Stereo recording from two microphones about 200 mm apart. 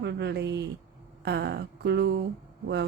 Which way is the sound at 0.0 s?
60° right (ahead or behind).